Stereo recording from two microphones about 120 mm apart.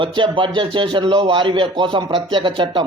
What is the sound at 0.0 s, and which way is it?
A man's voice, 45° right (ahead or behind).